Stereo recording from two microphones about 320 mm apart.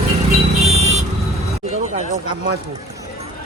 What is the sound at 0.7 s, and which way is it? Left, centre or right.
Vehicle, right.